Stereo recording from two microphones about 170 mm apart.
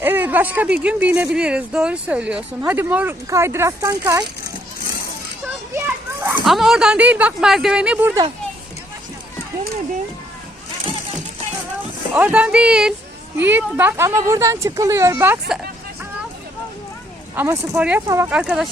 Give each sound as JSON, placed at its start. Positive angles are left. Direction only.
{"t": 0.0, "sound": "speech", "side_deg": -10}
{"t": 6.2, "sound": "speech", "side_deg": 0}
{"t": 12.1, "sound": "speech", "side_deg": -10}
{"t": 17.3, "sound": "speech", "side_deg": -15}